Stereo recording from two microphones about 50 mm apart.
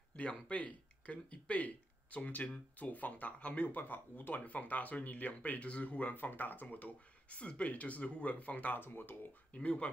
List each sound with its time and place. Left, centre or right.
0.1 s speech: left
6.1 s speech: left
8.8 s speech: left
9.5 s speech: left